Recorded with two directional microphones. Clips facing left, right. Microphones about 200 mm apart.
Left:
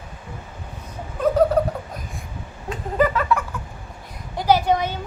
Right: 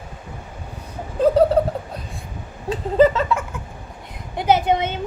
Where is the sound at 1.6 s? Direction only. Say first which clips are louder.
Right 2 dB; 30° right (ahead or behind).